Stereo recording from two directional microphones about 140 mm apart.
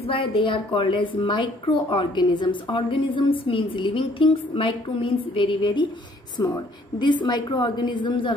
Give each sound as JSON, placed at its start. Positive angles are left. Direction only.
{"t": 0.0, "sound": "a woman's voice", "side_deg": 40}